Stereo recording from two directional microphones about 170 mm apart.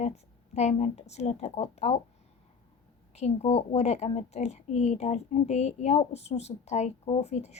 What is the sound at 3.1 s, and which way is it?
A woman's voice, 40° left (ahead or behind).